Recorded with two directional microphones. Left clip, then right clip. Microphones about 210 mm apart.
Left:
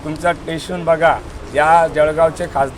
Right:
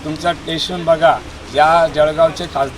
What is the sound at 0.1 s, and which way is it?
A man's voice, 5° left (ahead or behind).